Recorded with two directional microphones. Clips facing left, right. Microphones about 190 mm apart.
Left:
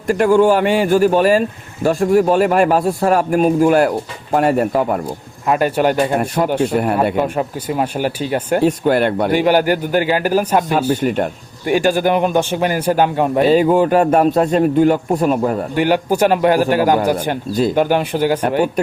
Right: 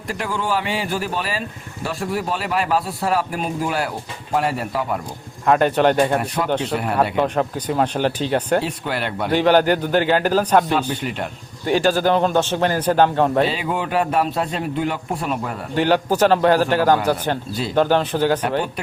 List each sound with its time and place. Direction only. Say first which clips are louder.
0.1 s speech: left 12 dB; 50° left (ahead or behind)
5.5 s a man's voice: left 1 dB; 5° left (ahead or behind)
6.1 s speech: left 5 dB; 45° left (ahead or behind)
7.2 s a man's voice: left 1 dB; 5° left (ahead or behind)
8.6 s speech: left 11 dB; 50° left (ahead or behind)
9.3 s a man's voice: right 1 dB; 10° left (ahead or behind)
10.7 s speech: left 6 dB; 45° left (ahead or behind)
11.6 s a man's voice: left 3 dB; 10° left (ahead or behind)
13.5 s speech: left 11 dB; 40° left (ahead or behind)
15.7 s a man's voice: right 2 dB; 10° left (ahead or behind)